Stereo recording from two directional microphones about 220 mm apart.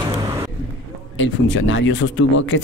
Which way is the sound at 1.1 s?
55° left (ahead or behind).